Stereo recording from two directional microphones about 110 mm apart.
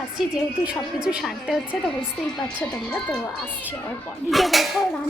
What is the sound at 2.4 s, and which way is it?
Speech, 10° left (ahead or behind).